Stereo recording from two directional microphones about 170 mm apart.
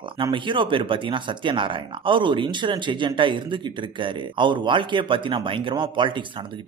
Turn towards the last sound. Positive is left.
turn(degrees=-30)  # may be behind; listen again after turning